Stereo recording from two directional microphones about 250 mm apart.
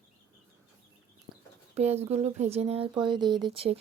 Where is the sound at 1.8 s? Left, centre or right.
Right.